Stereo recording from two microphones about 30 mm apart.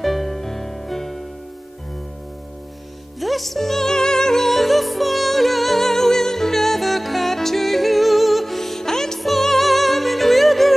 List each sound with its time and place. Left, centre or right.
0.0 s music: centre
3.2 s music: centre
4.5 s music: centre
9.2 s music: centre